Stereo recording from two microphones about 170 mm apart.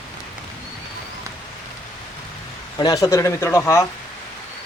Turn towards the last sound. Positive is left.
turn(degrees=15)  # may be behind; listen again after turning